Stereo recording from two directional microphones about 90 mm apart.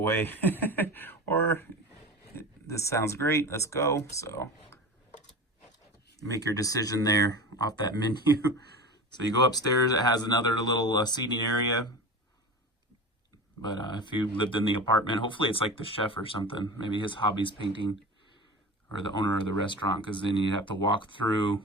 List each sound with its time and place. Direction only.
0.0 s speech: 25° left (ahead or behind)
6.2 s speech: 40° left (ahead or behind)
13.6 s speech: 55° left (ahead or behind)
19.2 s speech: 60° left (ahead or behind)